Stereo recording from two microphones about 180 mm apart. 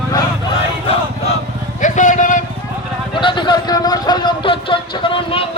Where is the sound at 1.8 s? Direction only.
45° left (ahead or behind).